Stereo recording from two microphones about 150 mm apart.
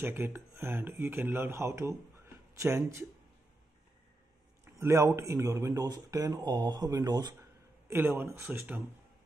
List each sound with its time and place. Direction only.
0.0 s speech: 15° right (ahead or behind)
4.7 s speech: 20° right (ahead or behind)
7.9 s speech: 15° right (ahead or behind)